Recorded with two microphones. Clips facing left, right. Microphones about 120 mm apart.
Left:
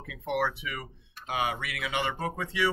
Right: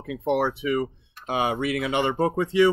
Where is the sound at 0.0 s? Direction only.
30° right (ahead or behind).